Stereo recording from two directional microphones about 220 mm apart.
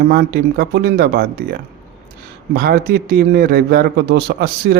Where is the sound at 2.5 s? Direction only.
45° right (ahead or behind).